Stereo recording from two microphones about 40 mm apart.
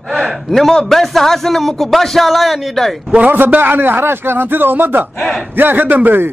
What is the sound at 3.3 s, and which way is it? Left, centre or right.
A man's voice, right.